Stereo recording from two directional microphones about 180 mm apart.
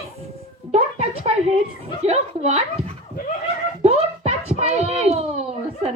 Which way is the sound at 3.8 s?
35° right (ahead or behind).